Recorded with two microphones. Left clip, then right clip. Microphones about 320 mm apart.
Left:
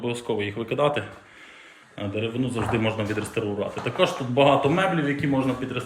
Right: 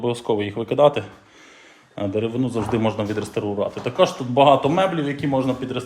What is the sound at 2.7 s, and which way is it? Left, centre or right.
Speech, centre.